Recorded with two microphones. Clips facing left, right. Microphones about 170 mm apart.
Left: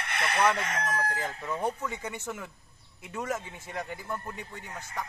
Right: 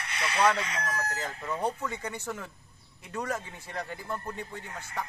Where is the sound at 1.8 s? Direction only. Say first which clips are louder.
Even; 15° left (ahead or behind).